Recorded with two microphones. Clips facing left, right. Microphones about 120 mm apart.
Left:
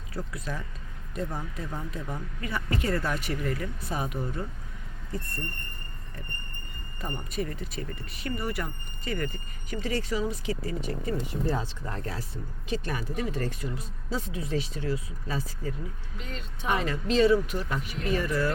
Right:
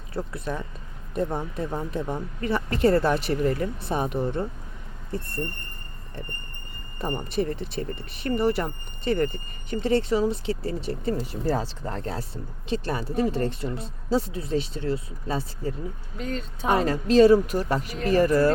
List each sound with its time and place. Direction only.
0.1 s speech: 25° right (ahead or behind)
7.0 s speech: 45° right (ahead or behind)
7.3 s speech: 30° right (ahead or behind)